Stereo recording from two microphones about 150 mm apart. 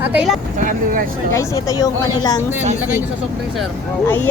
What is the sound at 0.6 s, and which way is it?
Speech, 60° right (ahead or behind).